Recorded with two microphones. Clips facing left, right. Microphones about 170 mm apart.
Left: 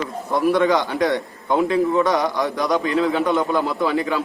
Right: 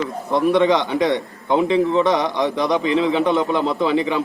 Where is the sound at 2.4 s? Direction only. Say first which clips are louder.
Right 2 dB; 20° right (ahead or behind).